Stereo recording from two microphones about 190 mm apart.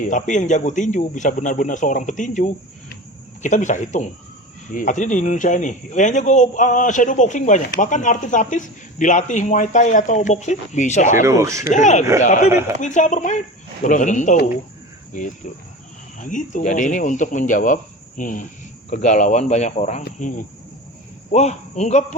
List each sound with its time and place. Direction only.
0.0 s speech: 40° left (ahead or behind)
11.2 s speech: 15° right (ahead or behind)
11.7 s speech: 40° left (ahead or behind)
16.1 s speech: 40° left (ahead or behind)
18.2 s cricket: 45° left (ahead or behind)
18.9 s speech: 40° left (ahead or behind)
20.0 s cricket: 45° left (ahead or behind)
21.3 s speech: 35° left (ahead or behind)